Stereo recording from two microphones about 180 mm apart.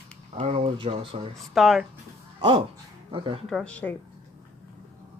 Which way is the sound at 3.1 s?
30° right (ahead or behind).